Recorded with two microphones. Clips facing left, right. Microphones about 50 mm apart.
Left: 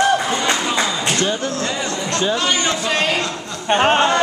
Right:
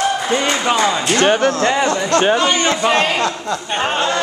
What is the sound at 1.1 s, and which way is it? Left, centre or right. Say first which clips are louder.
Speech: right 7 dB; right.